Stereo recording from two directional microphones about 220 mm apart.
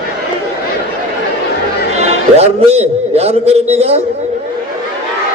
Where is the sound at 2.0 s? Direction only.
30° right (ahead or behind).